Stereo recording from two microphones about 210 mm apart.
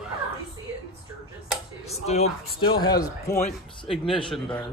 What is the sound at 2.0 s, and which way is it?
A man's voice, 30° left (ahead or behind).